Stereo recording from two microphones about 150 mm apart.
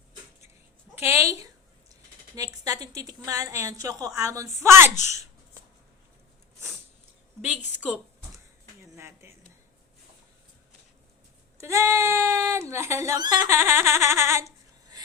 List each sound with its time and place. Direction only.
0.9 s a woman's voice: 20° right (ahead or behind)
7.8 s a woman's voice: 5° right (ahead or behind)
9.0 s a sound: 20° right (ahead or behind)
11.5 s a woman's voice: 20° right (ahead or behind)
13.5 s giggle: 15° right (ahead or behind)